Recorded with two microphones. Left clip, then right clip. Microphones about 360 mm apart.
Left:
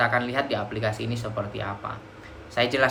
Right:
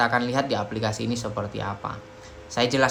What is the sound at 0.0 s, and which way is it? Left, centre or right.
A man's voice, centre.